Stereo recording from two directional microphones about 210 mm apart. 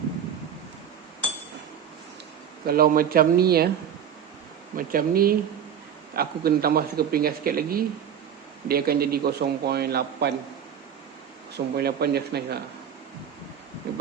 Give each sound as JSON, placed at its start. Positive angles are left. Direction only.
{"t": 2.6, "sound": "a man's voice", "side_deg": -45}
{"t": 4.8, "sound": "a man's voice", "side_deg": -40}
{"t": 11.5, "sound": "a man's voice", "side_deg": -50}